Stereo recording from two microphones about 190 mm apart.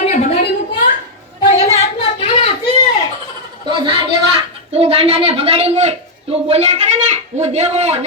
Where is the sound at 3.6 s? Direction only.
25° right (ahead or behind).